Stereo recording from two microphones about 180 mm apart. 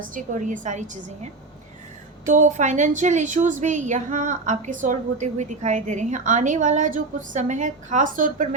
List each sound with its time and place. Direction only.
0.1 s a woman's voice: 45° right (ahead or behind)